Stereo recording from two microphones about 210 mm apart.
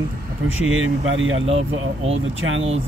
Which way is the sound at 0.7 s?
70° right (ahead or behind).